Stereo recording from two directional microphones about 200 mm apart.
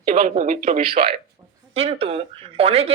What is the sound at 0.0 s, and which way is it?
Speech, 45° right (ahead or behind).